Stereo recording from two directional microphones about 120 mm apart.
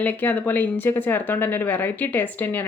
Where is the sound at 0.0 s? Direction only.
15° left (ahead or behind).